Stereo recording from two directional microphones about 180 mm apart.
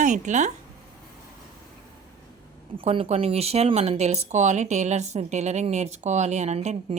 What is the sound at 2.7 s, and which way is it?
Speech, 30° right (ahead or behind).